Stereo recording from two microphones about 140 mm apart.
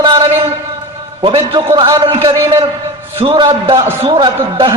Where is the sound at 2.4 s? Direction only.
40° right (ahead or behind).